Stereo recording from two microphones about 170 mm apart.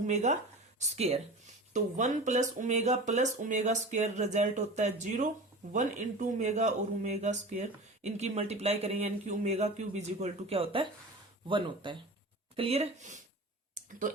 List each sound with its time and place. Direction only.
0.1 s speech: 45° right (ahead or behind)